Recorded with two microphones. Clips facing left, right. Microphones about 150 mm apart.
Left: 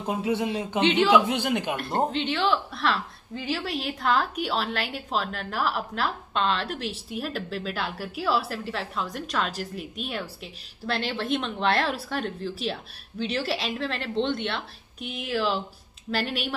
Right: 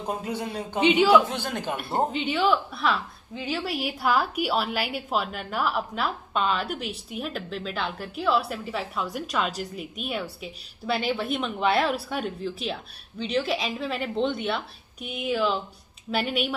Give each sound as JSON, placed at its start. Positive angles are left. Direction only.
{"t": 0.3, "sound": "speech", "side_deg": 20}
{"t": 0.7, "sound": "a woman's voice", "side_deg": -5}
{"t": 1.3, "sound": "a man's voice", "side_deg": 15}
{"t": 1.8, "sound": "a woman's voice", "side_deg": -5}